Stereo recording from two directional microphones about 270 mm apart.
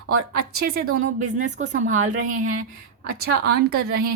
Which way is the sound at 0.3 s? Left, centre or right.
Right.